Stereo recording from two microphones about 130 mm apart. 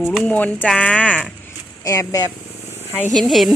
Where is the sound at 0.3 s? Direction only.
10° left (ahead or behind).